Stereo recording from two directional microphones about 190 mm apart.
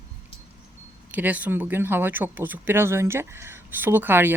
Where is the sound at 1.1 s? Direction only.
10° right (ahead or behind).